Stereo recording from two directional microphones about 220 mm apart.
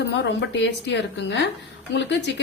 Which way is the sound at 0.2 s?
50° left (ahead or behind).